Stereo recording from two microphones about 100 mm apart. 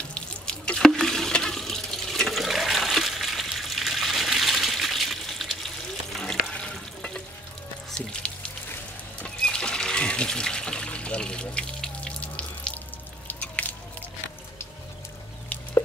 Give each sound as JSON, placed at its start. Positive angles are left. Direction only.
{"t": 0.1, "sound": "water", "side_deg": 10}
{"t": 8.1, "sound": "music", "side_deg": 10}
{"t": 9.2, "sound": "a sound", "side_deg": 10}
{"t": 13.3, "sound": "drip", "side_deg": 15}